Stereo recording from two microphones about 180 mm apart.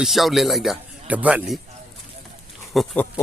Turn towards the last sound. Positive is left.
turn(degrees=0)  # may be behind; listen again after turning